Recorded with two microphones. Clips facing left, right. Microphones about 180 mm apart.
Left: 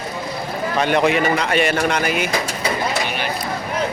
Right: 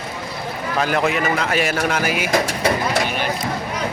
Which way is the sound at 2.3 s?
65° right (ahead or behind).